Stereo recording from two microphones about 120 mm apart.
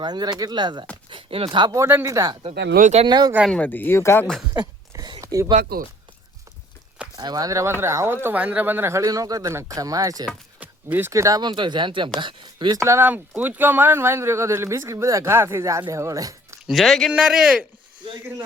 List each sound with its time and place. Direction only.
0.0 s speech: 35° right (ahead or behind)
1.1 s a sound: 50° right (ahead or behind)
1.5 s speech: 35° right (ahead or behind)
1.8 s speech: 20° right (ahead or behind)
2.8 s speech: 65° right (ahead or behind)
3.1 s speech: 35° right (ahead or behind)
3.5 s speech: 10° left (ahead or behind)
4.9 s a sound: 40° right (ahead or behind)
5.2 s a sound: 25° right (ahead or behind)
7.2 s speech: 35° right (ahead or behind)
10.6 s speech: 15° right (ahead or behind); by 12.8 s 40° right (ahead or behind)
12.8 s speech: 20° right (ahead or behind)
16.6 s a man's voice: centre (ahead or behind)